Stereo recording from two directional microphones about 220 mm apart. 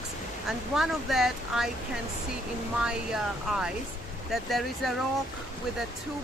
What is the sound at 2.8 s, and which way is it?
Speech, 5° right (ahead or behind).